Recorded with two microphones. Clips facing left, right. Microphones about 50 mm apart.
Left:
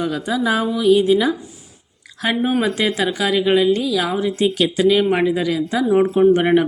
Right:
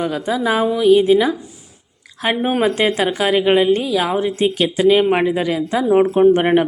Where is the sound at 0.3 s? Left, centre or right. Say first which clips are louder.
Right 2 dB; centre.